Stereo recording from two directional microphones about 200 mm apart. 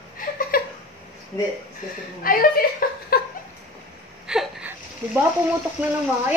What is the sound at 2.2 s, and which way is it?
A woman's voice, 45° left (ahead or behind).